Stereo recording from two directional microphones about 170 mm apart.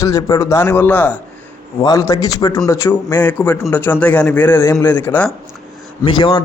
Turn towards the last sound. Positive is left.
turn(degrees=25)  # may be behind; listen again after turning